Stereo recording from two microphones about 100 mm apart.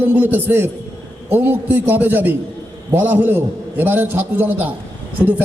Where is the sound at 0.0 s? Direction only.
15° right (ahead or behind).